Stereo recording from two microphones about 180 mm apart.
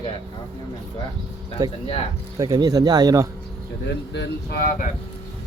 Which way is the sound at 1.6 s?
20° right (ahead or behind).